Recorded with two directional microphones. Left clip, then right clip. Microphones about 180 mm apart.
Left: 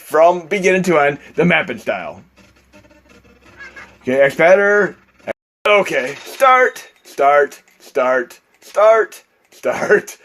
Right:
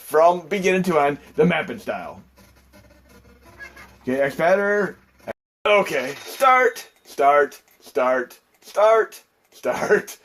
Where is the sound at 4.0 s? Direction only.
40° left (ahead or behind).